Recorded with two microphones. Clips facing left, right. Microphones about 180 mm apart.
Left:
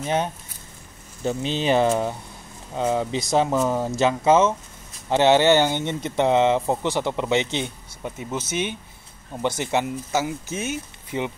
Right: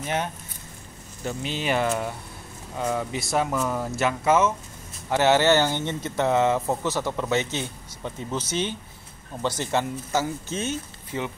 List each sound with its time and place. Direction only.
0.0 s speech: 20° left (ahead or behind)